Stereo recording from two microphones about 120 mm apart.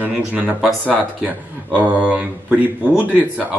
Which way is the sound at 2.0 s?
10° right (ahead or behind).